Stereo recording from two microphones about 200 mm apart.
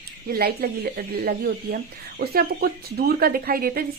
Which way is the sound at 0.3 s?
50° right (ahead or behind).